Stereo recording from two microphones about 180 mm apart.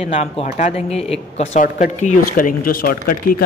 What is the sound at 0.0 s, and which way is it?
A man's voice, 35° left (ahead or behind).